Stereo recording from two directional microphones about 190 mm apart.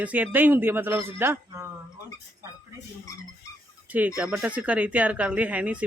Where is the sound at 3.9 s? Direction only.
5° right (ahead or behind).